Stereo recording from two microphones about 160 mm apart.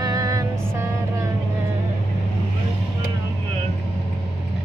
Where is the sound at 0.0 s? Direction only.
20° right (ahead or behind).